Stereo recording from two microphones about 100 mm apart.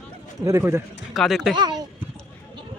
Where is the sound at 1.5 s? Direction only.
45° right (ahead or behind).